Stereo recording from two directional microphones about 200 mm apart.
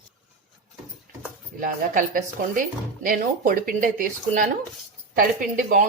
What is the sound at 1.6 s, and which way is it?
Speech, 40° right (ahead or behind).